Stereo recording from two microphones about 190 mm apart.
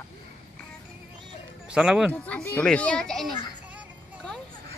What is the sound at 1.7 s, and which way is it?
Speech, 5° right (ahead or behind).